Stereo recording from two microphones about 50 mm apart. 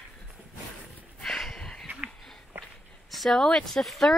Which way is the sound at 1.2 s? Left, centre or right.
Centre.